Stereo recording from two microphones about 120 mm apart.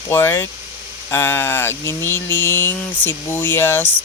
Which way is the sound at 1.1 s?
20° left (ahead or behind).